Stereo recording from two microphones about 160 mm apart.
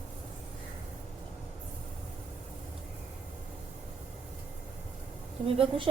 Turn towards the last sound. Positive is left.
turn(degrees=-35)  # may be behind; listen again after turning